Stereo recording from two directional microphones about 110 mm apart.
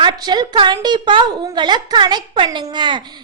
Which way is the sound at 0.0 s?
40° right (ahead or behind).